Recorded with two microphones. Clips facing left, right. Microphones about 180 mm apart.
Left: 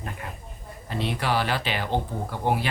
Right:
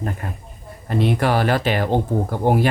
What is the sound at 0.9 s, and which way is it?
Speech, 50° right (ahead or behind).